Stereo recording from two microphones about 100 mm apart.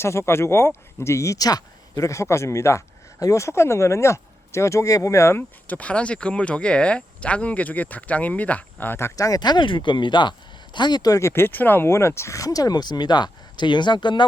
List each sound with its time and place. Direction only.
0.0 s speech: 25° left (ahead or behind); by 14.3 s 50° left (ahead or behind)